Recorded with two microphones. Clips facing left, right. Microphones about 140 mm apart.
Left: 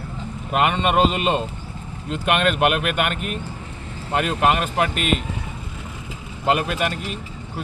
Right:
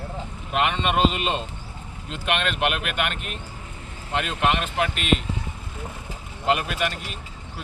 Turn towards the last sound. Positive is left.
turn(degrees=45)  # may be behind; listen again after turning